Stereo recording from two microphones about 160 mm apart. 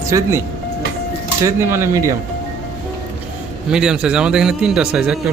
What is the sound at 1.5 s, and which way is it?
Speech, 15° right (ahead or behind).